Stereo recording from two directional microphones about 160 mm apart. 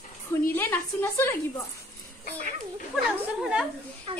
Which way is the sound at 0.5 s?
15° left (ahead or behind).